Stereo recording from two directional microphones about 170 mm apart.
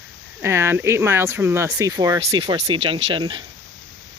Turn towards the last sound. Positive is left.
turn(degrees=-30)  # may be behind; listen again after turning